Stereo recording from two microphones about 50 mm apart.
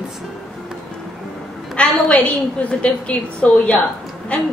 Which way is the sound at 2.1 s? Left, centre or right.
Left.